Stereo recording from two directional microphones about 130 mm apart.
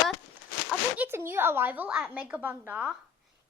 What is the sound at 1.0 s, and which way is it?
A woman's voice, 20° right (ahead or behind).